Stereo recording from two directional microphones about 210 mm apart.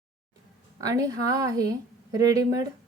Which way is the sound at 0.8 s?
15° right (ahead or behind).